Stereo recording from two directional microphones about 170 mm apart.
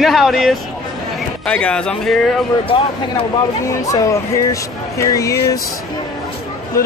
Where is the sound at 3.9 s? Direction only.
20° left (ahead or behind).